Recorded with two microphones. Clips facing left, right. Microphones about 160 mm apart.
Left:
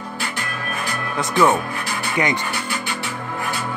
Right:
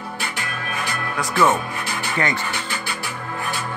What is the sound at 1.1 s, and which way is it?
Speech, 15° left (ahead or behind).